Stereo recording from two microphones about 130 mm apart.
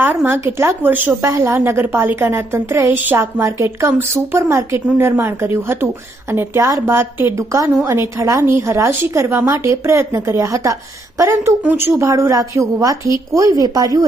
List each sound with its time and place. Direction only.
0.3 s a woman's voice: 20° right (ahead or behind)